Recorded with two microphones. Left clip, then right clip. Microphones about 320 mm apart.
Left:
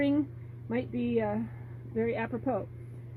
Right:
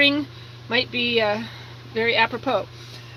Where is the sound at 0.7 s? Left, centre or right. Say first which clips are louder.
Right 11 dB; centre.